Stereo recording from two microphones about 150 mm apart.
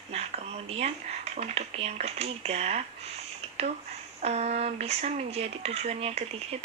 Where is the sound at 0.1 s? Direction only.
45° right (ahead or behind).